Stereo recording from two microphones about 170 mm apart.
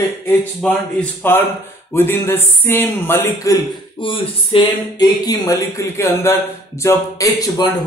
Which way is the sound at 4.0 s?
30° left (ahead or behind).